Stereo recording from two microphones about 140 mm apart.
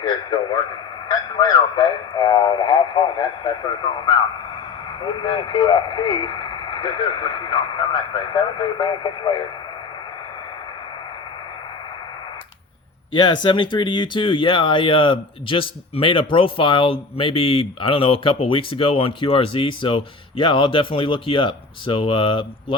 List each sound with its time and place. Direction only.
0.0 s radio: 35° left (ahead or behind)
5.0 s speech: 35° left (ahead or behind)
13.1 s speech: 30° left (ahead or behind)